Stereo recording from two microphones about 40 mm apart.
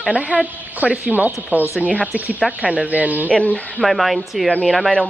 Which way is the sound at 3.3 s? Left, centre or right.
Left.